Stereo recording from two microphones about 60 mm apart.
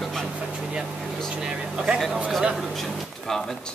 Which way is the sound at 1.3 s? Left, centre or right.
Centre.